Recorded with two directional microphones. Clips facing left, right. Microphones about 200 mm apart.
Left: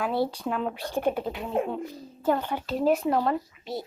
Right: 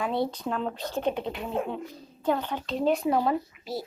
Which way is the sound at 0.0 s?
5° left (ahead or behind).